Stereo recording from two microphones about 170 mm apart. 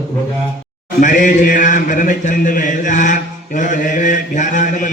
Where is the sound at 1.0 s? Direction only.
50° left (ahead or behind).